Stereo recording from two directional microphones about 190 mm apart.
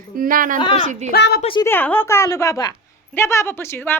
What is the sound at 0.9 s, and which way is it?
Speech, 35° right (ahead or behind).